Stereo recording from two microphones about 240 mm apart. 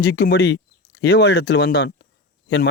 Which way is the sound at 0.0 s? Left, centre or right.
Left.